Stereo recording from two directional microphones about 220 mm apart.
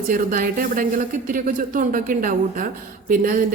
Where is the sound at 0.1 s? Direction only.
40° right (ahead or behind).